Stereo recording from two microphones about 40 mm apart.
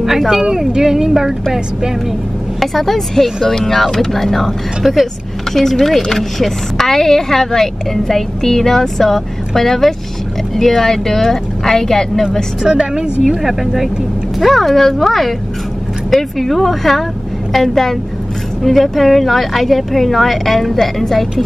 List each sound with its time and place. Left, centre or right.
0.3 s speech: centre
2.6 s speech: centre
12.6 s speech: centre
13.3 s speech: centre